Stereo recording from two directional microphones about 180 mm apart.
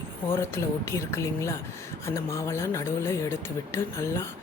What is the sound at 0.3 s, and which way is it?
Speech, 15° left (ahead or behind).